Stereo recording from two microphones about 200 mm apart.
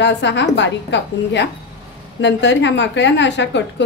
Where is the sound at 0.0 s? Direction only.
60° left (ahead or behind).